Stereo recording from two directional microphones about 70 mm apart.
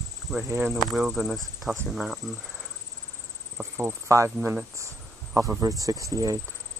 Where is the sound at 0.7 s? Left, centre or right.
Centre.